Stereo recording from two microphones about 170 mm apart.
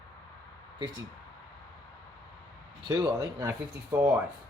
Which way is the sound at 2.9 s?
20° right (ahead or behind).